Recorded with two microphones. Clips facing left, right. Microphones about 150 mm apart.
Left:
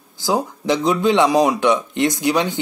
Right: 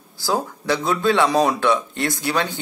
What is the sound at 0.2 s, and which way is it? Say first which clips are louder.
Speech: left 3 dB; 20° left (ahead or behind).